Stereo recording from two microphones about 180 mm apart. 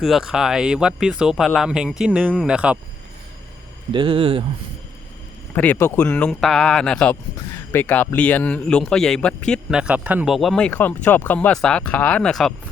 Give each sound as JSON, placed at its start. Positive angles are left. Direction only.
{"t": 0.0, "sound": "a man's voice", "side_deg": 0}
{"t": 3.9, "sound": "speech", "side_deg": -30}
{"t": 5.5, "sound": "a man's voice", "side_deg": 10}